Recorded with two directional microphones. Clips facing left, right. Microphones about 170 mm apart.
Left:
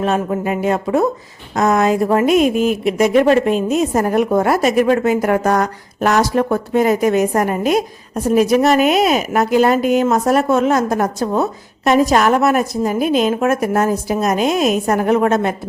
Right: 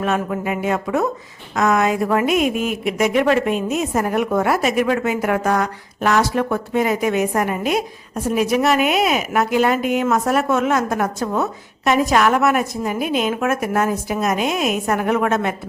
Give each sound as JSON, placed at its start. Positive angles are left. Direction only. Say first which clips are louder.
{"t": 0.0, "sound": "a woman's voice", "louder": "left 3 dB", "side_deg": 30}